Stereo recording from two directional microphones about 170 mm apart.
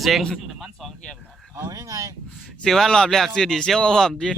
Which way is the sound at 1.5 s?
20° right (ahead or behind).